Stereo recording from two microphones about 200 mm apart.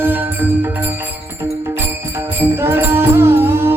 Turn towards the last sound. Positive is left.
turn(degrees=-10)  # may be behind; listen again after turning